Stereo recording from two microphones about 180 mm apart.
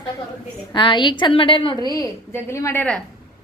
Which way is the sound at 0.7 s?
25° left (ahead or behind).